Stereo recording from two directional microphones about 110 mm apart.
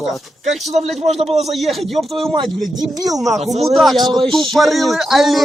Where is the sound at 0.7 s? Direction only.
85° right.